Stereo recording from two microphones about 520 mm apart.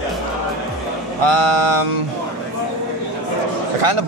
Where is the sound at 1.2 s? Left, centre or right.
Right.